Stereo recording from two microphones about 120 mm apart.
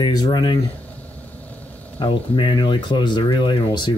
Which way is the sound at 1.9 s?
45° left (ahead or behind).